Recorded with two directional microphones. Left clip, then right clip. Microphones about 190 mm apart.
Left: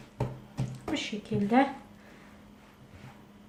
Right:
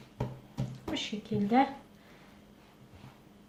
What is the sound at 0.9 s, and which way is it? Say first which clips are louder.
Speech: left 2 dB; centre (ahead or behind).